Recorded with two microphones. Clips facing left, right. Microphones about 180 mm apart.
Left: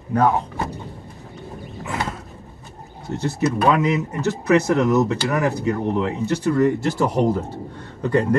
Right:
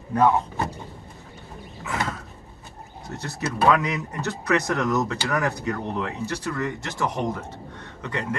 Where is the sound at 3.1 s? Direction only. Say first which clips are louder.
Left 9 dB; 30° left (ahead or behind).